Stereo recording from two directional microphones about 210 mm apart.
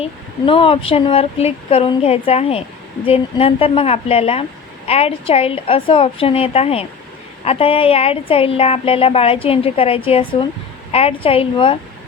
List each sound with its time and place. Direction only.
0.0 s speech: 25° left (ahead or behind)